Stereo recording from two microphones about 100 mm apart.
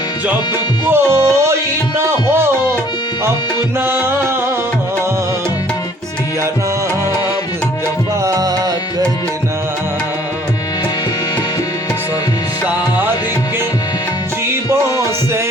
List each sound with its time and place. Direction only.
0.9 s music: 25° right (ahead or behind)
3.8 s music: 25° right (ahead or behind)
8.2 s music: 35° right (ahead or behind)
14.7 s music: 30° right (ahead or behind)